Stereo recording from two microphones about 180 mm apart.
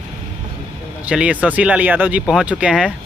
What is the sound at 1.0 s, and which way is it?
Speech, 5° right (ahead or behind).